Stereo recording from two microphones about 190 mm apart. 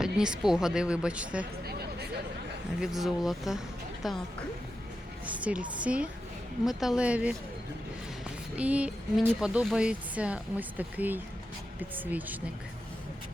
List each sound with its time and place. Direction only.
0.0 s a woman's voice: 5° right (ahead or behind)
1.6 s a sound: 60° right (ahead or behind)
2.8 s a woman's voice: centre (ahead or behind)
5.2 s a woman's voice: 5° right (ahead or behind)
8.5 s speech: 5° right (ahead or behind)